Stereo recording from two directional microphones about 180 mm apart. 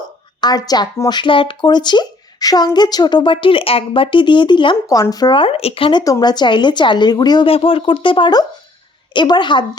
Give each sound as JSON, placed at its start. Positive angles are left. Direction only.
{"t": 0.4, "sound": "speech", "side_deg": 20}